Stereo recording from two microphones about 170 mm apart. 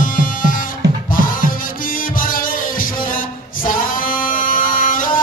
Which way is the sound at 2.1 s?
55° left (ahead or behind).